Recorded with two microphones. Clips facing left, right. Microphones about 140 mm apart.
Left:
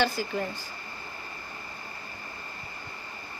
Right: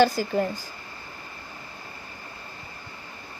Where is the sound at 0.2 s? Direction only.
45° right (ahead or behind).